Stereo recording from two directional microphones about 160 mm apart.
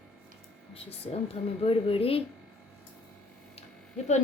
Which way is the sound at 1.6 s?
35° left (ahead or behind).